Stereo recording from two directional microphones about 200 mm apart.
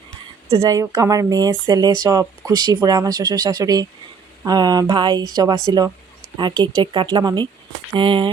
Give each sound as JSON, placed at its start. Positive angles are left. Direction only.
{"t": 0.5, "sound": "speech", "side_deg": -20}